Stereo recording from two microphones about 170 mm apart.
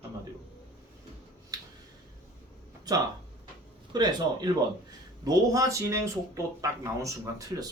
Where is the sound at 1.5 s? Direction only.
20° right (ahead or behind).